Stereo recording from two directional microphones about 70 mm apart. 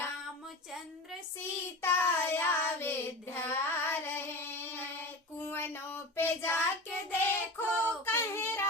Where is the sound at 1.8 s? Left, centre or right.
Left.